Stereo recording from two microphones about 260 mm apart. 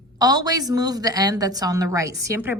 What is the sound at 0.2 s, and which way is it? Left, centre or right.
A woman's voice, centre.